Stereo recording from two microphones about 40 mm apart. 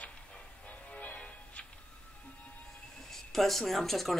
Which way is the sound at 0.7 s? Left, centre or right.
Left.